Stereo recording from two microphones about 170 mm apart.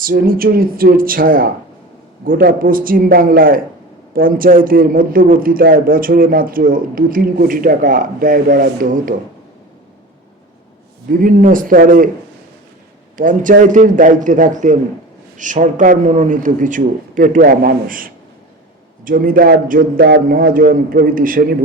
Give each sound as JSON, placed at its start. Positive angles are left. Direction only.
{"t": 0.0, "sound": "a man's voice", "side_deg": -60}
{"t": 11.1, "sound": "a man's voice", "side_deg": -55}
{"t": 13.1, "sound": "a man's voice", "side_deg": -50}